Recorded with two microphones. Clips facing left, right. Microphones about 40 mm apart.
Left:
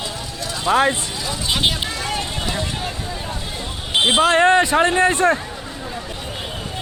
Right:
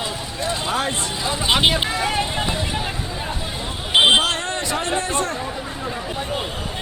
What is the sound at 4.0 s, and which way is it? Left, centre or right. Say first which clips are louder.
Speech: right 2 dB; right.